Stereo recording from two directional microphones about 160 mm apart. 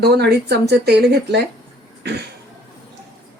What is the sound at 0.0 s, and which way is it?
Speech, 90° right.